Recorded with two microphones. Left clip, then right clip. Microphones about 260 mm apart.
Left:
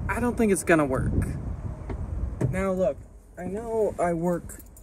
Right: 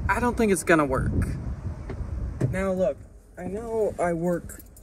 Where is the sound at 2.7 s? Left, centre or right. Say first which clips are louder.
Even; centre.